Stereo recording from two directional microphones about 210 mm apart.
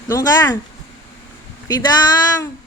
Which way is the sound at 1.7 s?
20° left (ahead or behind).